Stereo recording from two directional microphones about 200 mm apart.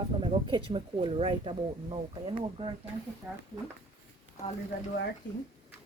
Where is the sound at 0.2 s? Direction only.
25° right (ahead or behind).